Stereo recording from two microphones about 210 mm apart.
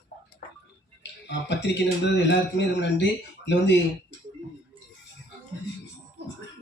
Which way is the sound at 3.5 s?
55° left (ahead or behind).